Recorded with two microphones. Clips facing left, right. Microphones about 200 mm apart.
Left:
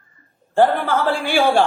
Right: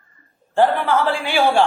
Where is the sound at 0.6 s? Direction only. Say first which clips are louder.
Even; 45° left (ahead or behind).